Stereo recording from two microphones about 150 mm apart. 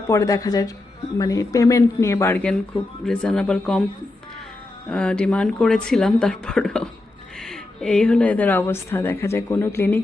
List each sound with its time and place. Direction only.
0.1 s speech: 20° left (ahead or behind)
2.4 s a woman's voice: 5° left (ahead or behind)
4.9 s a woman's voice: 5° left (ahead or behind)